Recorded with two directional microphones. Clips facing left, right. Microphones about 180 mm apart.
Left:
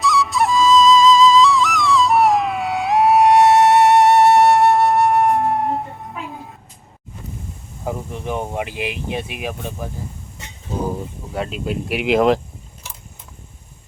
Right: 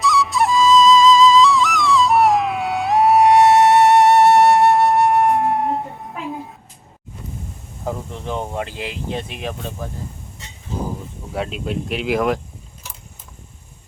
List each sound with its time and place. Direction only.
0.0 s music: centre (ahead or behind)
7.9 s speech: 15° left (ahead or behind)
11.3 s speech: centre (ahead or behind)
12.0 s speech: 25° left (ahead or behind)